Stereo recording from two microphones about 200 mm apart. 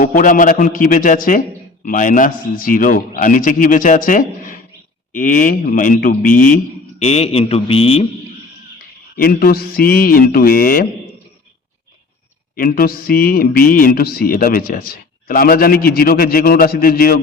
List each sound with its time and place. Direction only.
0.0 s a man's voice: 40° left (ahead or behind)
7.0 s speech: 30° left (ahead or behind)
9.1 s speech: 45° left (ahead or behind)
12.5 s speech: 45° left (ahead or behind)